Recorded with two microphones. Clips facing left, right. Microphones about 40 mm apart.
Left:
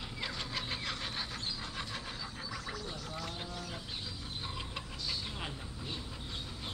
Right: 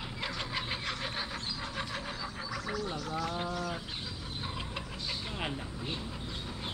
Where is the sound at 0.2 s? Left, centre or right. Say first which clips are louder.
Right 3 dB; centre.